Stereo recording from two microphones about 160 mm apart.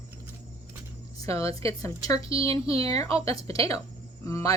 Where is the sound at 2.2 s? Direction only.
35° right (ahead or behind).